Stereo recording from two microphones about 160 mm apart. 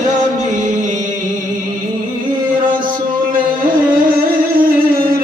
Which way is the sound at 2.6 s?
30° right (ahead or behind).